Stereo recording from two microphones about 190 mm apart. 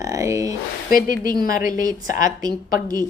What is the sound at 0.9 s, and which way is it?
Speech, 45° left (ahead or behind).